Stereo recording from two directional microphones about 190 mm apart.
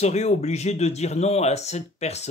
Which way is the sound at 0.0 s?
35° left (ahead or behind).